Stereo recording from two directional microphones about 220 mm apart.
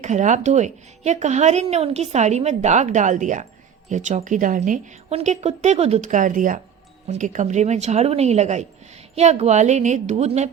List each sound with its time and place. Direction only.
0.0 s speech: 35° right (ahead or behind)